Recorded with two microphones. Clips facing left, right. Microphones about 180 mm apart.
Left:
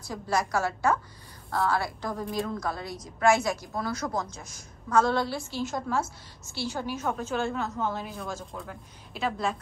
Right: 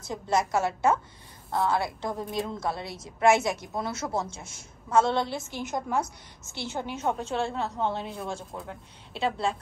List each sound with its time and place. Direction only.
0.1 s a woman's voice: 20° right (ahead or behind)
3.3 s a woman's voice: centre (ahead or behind)
3.7 s a woman's voice: 25° right (ahead or behind)